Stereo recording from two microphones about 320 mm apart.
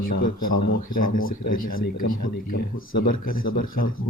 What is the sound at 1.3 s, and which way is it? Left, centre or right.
Speech, left.